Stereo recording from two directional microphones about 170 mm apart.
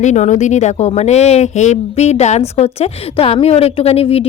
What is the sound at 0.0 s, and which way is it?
A woman's voice, 45° left (ahead or behind).